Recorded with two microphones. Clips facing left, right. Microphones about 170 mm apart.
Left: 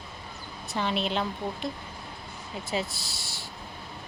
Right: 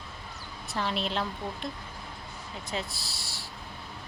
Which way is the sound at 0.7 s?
Centre (ahead or behind).